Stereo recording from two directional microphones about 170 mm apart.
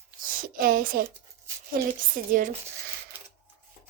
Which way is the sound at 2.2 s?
55° right (ahead or behind).